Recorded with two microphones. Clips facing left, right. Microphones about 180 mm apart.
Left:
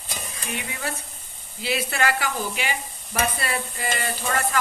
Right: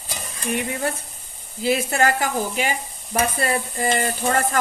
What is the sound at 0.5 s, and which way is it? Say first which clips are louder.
A woman's voice: right 7 dB; 50° right (ahead or behind).